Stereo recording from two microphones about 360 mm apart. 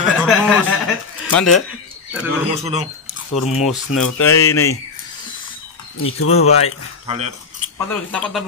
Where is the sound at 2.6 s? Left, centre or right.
Centre.